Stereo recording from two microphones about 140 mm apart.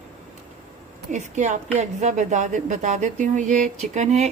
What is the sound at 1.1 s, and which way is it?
A woman's voice, 60° right (ahead or behind).